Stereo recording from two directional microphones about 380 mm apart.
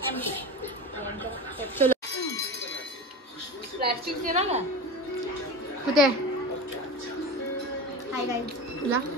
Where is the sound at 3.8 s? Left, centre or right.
Centre.